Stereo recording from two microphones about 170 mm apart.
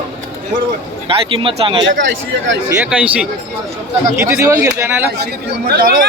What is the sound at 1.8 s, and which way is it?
Speech, 90° right.